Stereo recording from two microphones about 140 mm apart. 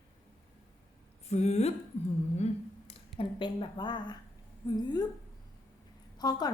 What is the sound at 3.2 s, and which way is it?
A woman's voice, 35° left (ahead or behind).